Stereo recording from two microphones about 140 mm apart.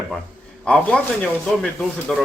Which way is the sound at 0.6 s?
5° left (ahead or behind).